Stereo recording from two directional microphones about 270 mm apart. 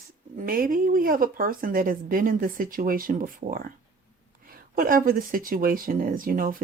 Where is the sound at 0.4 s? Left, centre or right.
Right.